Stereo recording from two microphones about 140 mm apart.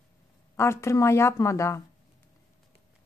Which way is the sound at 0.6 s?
20° left (ahead or behind).